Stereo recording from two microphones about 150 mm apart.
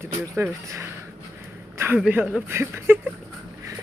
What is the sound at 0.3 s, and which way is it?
Speech, 15° right (ahead or behind).